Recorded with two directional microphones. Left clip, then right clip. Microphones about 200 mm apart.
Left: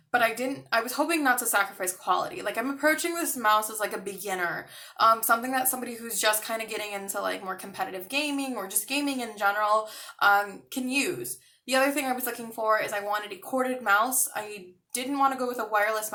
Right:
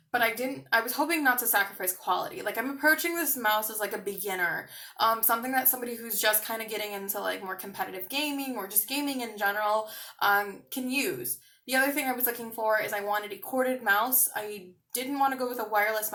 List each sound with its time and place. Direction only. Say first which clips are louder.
0.7 s speech: even; 20° left (ahead or behind)